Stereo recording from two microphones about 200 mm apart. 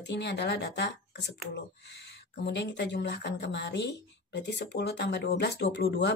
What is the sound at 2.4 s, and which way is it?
Speech, 60° left (ahead or behind).